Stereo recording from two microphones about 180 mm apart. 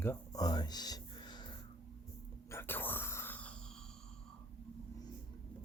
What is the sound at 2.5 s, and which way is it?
Whispering, 15° left (ahead or behind).